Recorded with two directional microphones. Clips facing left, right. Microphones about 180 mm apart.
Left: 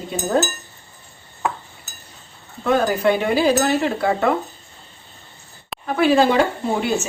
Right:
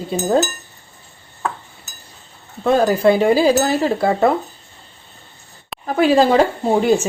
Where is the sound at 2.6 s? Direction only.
30° right (ahead or behind).